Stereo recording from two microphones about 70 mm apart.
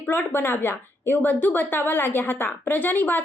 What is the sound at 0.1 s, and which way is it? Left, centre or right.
A woman's voice, left.